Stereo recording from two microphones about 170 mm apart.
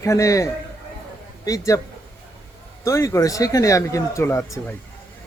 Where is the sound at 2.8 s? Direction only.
15° left (ahead or behind).